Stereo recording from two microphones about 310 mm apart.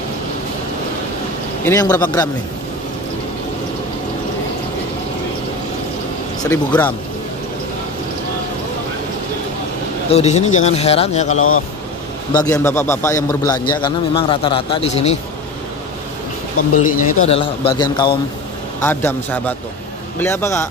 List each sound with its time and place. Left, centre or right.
1.6 s a man's voice: centre
6.5 s a man's voice: centre
10.0 s speech: centre
11.3 s speech: left
12.3 s a man's voice: centre
16.5 s speech: left
17.3 s a man's voice: centre